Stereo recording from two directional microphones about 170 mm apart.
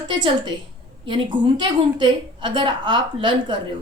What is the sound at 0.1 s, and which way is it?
A woman's voice, 25° right (ahead or behind).